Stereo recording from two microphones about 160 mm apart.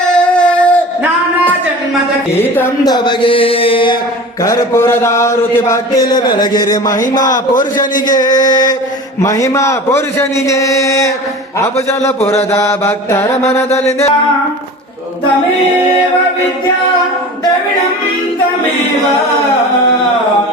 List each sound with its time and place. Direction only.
0.1 s a sound: 5° left (ahead or behind)
2.8 s music: 25° left (ahead or behind)
4.4 s a man's voice: 20° left (ahead or behind)
7.3 s speech: 55° left (ahead or behind)
8.0 s a man's voice: 25° left (ahead or behind)
12.2 s music: 40° left (ahead or behind)
12.8 s mantra: 15° left (ahead or behind)
13.3 s a sound: 40° left (ahead or behind)
13.7 s mantra: 20° left (ahead or behind)